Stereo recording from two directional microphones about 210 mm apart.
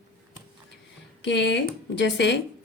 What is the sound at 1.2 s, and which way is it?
A woman's voice, 55° left (ahead or behind).